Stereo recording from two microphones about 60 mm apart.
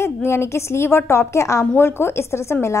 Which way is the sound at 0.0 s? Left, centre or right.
Left.